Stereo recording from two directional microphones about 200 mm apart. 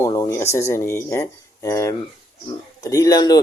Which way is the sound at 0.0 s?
15° left (ahead or behind).